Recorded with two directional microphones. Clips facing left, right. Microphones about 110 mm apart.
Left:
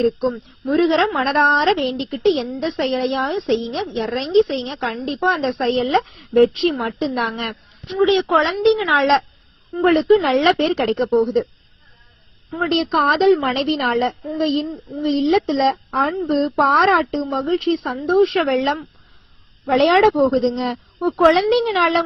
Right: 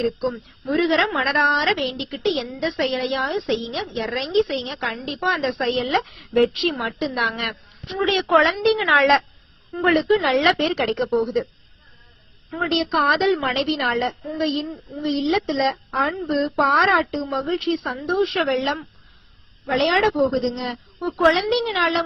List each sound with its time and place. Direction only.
0.7 s a woman's voice: 35° left (ahead or behind)
8.0 s a woman's voice: 25° left (ahead or behind)
9.8 s a woman's voice: 35° left (ahead or behind)
12.7 s a woman's voice: 40° left (ahead or behind)